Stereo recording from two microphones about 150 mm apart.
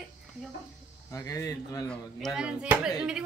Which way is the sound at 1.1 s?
20° left (ahead or behind).